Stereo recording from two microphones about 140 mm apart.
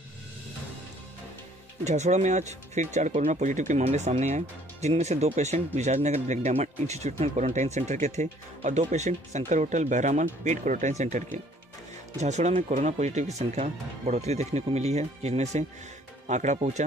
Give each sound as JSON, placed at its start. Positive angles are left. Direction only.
{"t": 1.9, "sound": "speech", "side_deg": -55}